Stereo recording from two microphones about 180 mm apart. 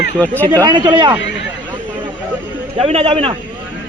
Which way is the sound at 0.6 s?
25° right (ahead or behind).